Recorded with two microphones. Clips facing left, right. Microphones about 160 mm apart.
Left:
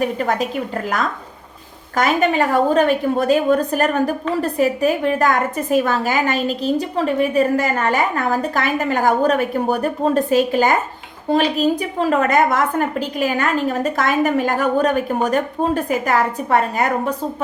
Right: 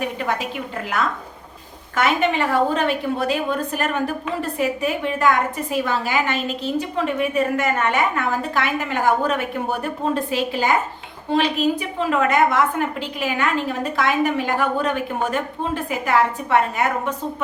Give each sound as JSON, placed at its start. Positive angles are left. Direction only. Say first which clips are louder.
{"t": 0.0, "sound": "a woman's voice", "louder": "left 5 dB", "side_deg": 40}